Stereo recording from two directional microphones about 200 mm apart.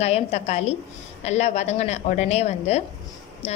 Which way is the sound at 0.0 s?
30° left (ahead or behind).